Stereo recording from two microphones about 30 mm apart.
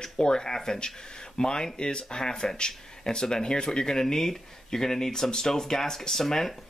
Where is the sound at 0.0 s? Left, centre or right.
Left.